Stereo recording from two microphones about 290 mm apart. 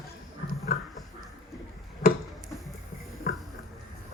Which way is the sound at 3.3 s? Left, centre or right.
Left.